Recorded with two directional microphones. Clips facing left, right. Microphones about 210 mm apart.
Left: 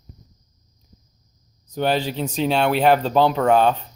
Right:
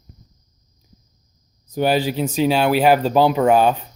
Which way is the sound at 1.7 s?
10° right (ahead or behind).